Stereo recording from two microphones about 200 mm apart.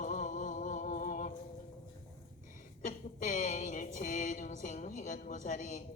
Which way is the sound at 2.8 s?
40° left (ahead or behind).